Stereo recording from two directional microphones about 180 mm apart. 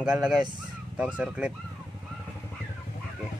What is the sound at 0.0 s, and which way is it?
Speech, 5° right (ahead or behind).